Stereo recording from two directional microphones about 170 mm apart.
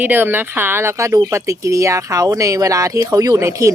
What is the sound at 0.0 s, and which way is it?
Speech, 10° right (ahead or behind).